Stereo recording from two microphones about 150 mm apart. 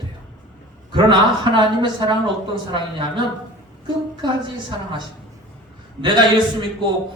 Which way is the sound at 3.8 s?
30° right (ahead or behind).